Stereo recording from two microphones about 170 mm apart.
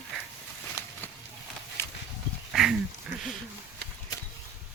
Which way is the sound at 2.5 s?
5° right (ahead or behind).